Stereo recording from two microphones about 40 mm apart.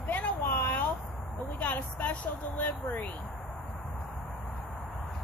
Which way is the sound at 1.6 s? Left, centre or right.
Left.